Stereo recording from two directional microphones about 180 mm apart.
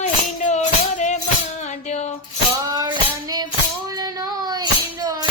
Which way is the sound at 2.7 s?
20° right (ahead or behind).